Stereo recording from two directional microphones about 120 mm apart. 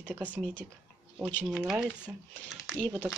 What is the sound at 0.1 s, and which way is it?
Speech, 15° right (ahead or behind).